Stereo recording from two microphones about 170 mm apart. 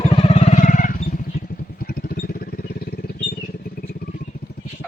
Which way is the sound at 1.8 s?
65° left (ahead or behind).